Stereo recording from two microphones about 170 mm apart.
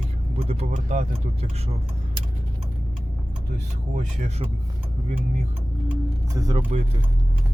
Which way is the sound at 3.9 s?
50° right (ahead or behind).